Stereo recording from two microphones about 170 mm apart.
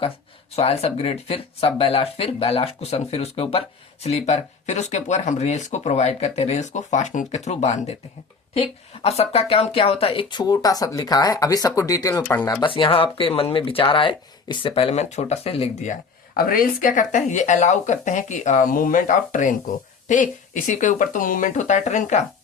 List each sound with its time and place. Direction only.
0.5 s speech: 35° left (ahead or behind)